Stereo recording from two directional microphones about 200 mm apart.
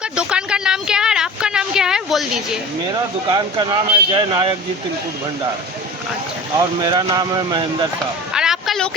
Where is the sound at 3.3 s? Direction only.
20° right (ahead or behind).